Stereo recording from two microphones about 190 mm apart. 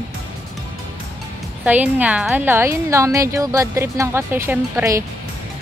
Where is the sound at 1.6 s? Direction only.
10° right (ahead or behind).